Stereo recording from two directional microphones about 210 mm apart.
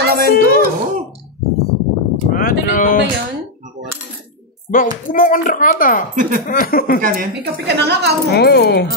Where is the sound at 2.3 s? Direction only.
40° left (ahead or behind).